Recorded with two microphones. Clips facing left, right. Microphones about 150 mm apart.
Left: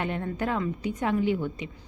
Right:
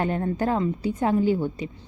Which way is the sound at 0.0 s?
35° right (ahead or behind).